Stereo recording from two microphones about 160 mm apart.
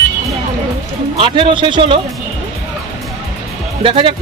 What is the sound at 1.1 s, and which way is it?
Speech, 35° right (ahead or behind).